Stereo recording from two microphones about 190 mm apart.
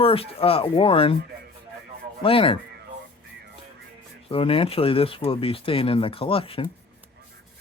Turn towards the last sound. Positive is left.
turn(degrees=30)  # may be behind; listen again after turning